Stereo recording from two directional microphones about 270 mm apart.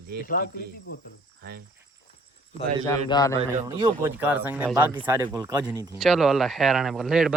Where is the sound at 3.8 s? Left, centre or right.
Centre.